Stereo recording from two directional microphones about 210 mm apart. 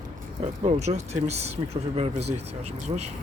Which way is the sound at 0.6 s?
30° right (ahead or behind).